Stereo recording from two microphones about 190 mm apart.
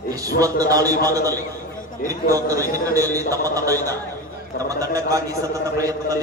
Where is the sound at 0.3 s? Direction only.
20° right (ahead or behind).